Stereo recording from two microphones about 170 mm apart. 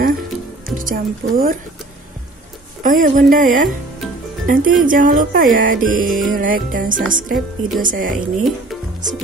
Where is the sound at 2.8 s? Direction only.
50° right (ahead or behind).